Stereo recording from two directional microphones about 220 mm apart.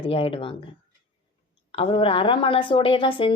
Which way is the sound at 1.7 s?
25° left (ahead or behind).